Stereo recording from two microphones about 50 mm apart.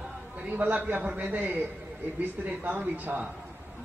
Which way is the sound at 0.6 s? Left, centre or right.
Right.